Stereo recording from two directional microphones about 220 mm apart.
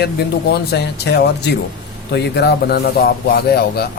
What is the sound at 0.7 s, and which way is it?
A man's voice, 50° left (ahead or behind).